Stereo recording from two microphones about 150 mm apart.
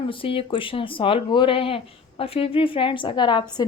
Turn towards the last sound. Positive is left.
turn(degrees=30)  # may be behind; listen again after turning